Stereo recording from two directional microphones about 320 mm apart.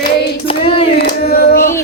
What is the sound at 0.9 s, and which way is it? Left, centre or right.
Singing, left.